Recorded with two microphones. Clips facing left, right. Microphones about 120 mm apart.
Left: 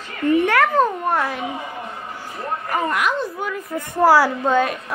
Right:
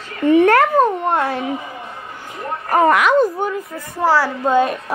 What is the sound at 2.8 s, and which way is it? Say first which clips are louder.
Speech: right 9 dB; 85° right.